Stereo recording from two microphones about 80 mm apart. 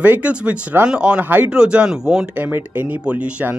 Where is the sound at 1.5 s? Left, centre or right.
Centre.